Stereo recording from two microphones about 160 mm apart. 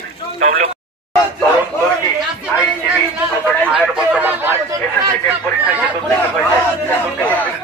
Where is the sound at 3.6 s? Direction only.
5° right (ahead or behind).